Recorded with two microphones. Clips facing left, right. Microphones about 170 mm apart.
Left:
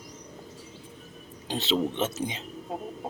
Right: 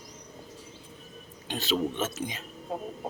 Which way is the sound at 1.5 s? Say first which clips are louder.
Left 2 dB; 25° left (ahead or behind).